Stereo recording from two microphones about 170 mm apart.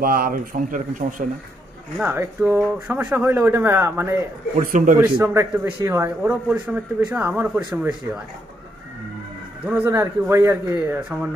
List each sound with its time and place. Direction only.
0.0 s speech: 60° right (ahead or behind)
2.0 s speech: 15° right (ahead or behind)
4.6 s speech: 50° right (ahead or behind)
5.2 s speech: 15° right (ahead or behind)
9.7 s speech: 15° right (ahead or behind)